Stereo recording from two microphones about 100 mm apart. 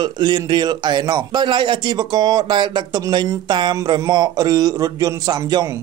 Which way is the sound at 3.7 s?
35° right (ahead or behind).